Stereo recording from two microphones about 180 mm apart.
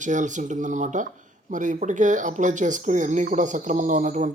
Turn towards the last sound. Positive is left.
turn(degrees=-45)  # may be behind; listen again after turning